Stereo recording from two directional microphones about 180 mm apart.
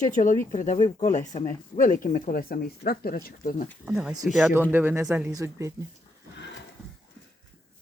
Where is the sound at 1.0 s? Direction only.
40° left (ahead or behind).